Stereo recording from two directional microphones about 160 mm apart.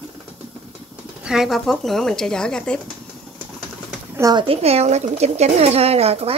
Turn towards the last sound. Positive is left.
turn(degrees=-40)  # may be behind; listen again after turning